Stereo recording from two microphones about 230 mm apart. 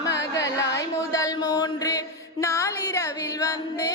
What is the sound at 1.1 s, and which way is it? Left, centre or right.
Mantra, centre.